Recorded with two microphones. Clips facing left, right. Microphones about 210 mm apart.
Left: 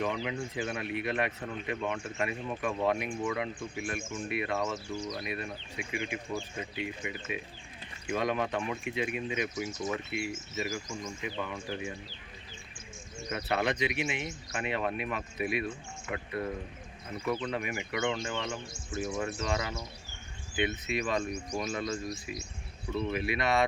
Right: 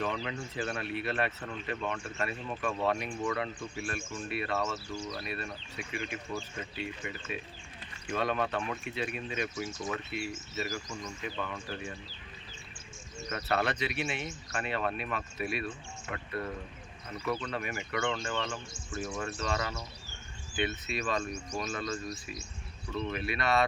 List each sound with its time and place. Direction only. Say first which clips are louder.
0.0 s speech: left 2 dB; 10° left (ahead or behind)
13.2 s speech: left 1 dB; 15° left (ahead or behind)